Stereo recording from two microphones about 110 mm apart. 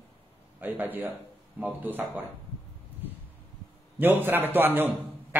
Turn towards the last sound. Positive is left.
turn(degrees=-20)  # may be behind; listen again after turning